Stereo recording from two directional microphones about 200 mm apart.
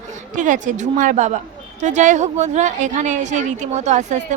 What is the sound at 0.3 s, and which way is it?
A woman's voice, 40° right (ahead or behind).